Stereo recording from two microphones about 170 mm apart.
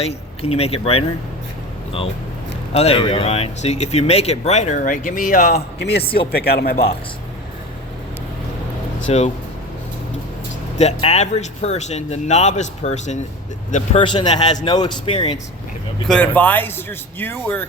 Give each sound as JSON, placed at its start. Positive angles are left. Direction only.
{"t": 0.0, "sound": "speech", "side_deg": 35}
{"t": 2.7, "sound": "speech", "side_deg": 35}
{"t": 6.0, "sound": "speech", "side_deg": 30}
{"t": 6.3, "sound": "speech", "side_deg": 65}
{"t": 9.1, "sound": "speech", "side_deg": 35}
{"t": 10.8, "sound": "speech", "side_deg": 40}
{"t": 14.0, "sound": "speech", "side_deg": 25}
{"t": 16.0, "sound": "speech", "side_deg": 5}